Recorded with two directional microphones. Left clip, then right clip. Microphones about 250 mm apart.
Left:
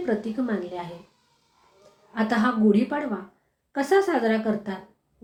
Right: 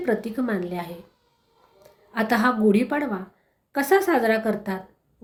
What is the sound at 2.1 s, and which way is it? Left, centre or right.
A woman's voice, right.